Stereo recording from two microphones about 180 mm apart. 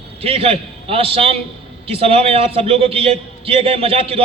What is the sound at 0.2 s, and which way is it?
A man's voice, 30° right (ahead or behind).